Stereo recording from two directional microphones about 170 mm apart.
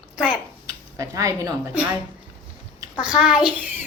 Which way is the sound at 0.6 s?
20° right (ahead or behind).